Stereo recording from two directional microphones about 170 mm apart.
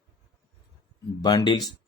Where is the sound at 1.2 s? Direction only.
25° left (ahead or behind).